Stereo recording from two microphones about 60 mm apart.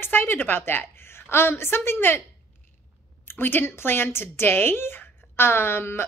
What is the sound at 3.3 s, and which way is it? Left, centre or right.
A woman's voice, left.